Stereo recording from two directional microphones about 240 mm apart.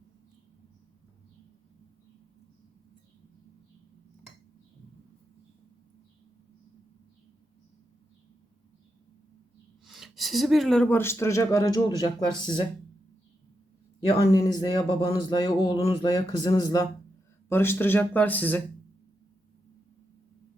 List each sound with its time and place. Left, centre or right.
9.8 s speech: centre
14.1 s speech: centre